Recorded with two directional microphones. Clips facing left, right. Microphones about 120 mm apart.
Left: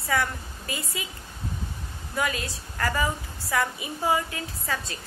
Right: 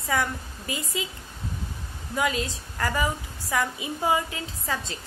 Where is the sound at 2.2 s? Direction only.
20° right (ahead or behind).